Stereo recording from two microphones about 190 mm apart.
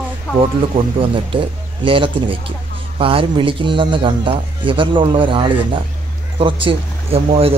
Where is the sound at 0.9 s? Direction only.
30° right (ahead or behind).